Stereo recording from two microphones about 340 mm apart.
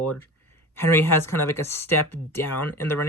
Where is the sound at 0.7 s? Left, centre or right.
Centre.